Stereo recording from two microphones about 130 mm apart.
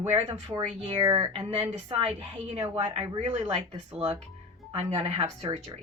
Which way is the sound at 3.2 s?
60° right (ahead or behind).